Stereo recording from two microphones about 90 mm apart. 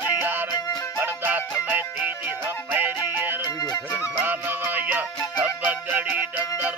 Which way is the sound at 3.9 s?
20° right (ahead or behind).